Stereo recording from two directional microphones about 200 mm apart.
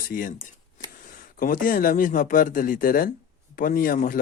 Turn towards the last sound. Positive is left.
turn(degrees=45)  # may be behind; listen again after turning